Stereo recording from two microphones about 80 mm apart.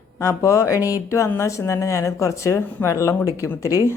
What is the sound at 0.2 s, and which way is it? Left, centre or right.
Speech, left.